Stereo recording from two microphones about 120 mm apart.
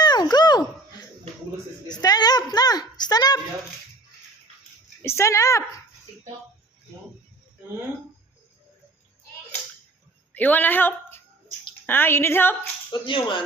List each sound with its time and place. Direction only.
0.0 s a sound: 35° left (ahead or behind)
5.0 s speech: 25° left (ahead or behind)
10.3 s a woman's voice: 15° left (ahead or behind)
12.9 s speech: 45° left (ahead or behind)